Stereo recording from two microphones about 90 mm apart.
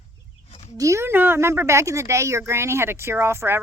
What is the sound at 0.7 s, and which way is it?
A woman's voice, 35° right (ahead or behind).